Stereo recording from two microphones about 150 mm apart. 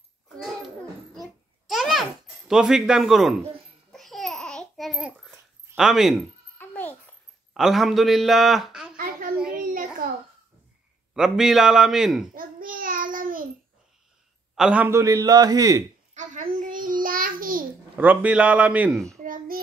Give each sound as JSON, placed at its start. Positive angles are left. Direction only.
{"t": 1.7, "sound": "babbling", "side_deg": 0}
{"t": 5.8, "sound": "a man's voice", "side_deg": -5}
{"t": 6.6, "sound": "babbling", "side_deg": 10}
{"t": 7.5, "sound": "a man's voice", "side_deg": 0}
{"t": 8.9, "sound": "a sound", "side_deg": -70}
{"t": 11.1, "sound": "a man's voice", "side_deg": -5}
{"t": 12.4, "sound": "child singing", "side_deg": -70}
{"t": 14.5, "sound": "a man's voice", "side_deg": -5}
{"t": 16.5, "sound": "child singing", "side_deg": -60}
{"t": 17.9, "sound": "a man's voice", "side_deg": -10}
{"t": 19.2, "sound": "child singing", "side_deg": -70}